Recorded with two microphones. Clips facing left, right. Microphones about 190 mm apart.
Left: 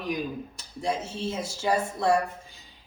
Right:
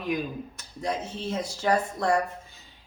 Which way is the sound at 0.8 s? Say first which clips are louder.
Left 1 dB; 10° left (ahead or behind).